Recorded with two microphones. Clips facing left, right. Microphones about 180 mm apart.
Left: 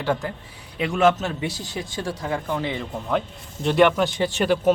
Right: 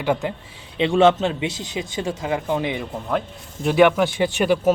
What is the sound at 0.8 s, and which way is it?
A man's voice, 30° right (ahead or behind).